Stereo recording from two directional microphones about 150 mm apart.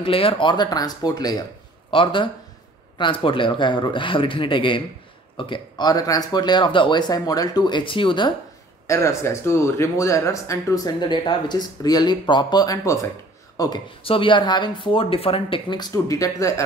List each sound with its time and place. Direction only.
0.0 s speech: 40° left (ahead or behind)
8.8 s speech: 20° left (ahead or behind)
14.0 s speech: 35° left (ahead or behind)